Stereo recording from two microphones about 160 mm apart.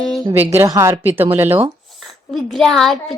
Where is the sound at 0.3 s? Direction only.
15° right (ahead or behind).